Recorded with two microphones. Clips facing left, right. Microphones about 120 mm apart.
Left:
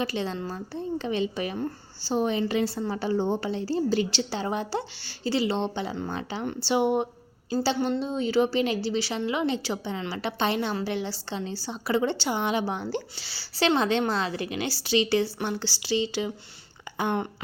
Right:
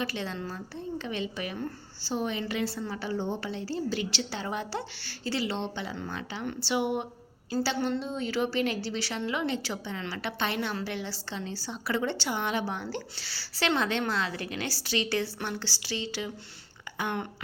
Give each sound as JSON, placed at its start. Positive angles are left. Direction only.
{"t": 0.0, "sound": "a woman's voice", "side_deg": 25}